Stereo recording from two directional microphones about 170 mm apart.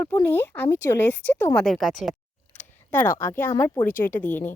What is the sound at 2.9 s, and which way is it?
Speech, 15° left (ahead or behind).